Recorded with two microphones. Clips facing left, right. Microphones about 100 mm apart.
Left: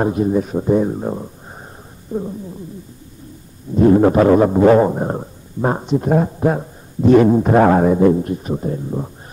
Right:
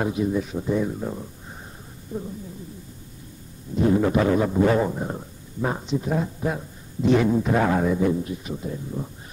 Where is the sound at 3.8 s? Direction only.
50° left (ahead or behind).